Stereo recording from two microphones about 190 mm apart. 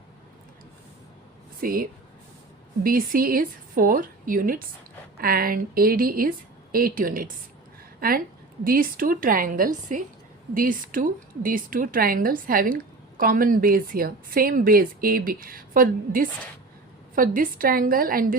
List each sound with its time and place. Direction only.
1.6 s a woman's voice: 50° right (ahead or behind)